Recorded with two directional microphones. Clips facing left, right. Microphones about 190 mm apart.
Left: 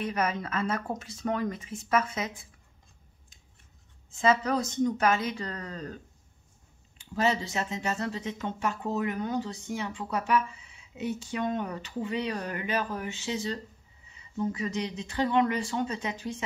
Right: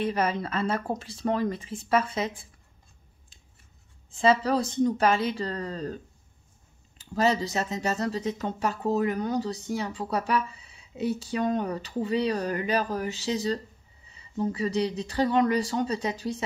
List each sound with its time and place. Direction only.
0.0 s speech: 30° right (ahead or behind)
4.1 s speech: 30° right (ahead or behind)
7.2 s speech: 40° right (ahead or behind)